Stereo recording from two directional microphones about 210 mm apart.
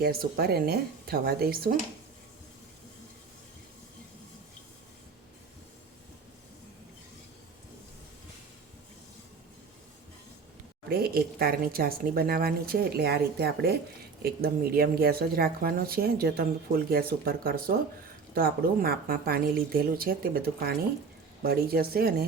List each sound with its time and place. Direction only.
0.0 s a woman's voice: 45° right (ahead or behind)
10.8 s a woman's voice: 50° right (ahead or behind)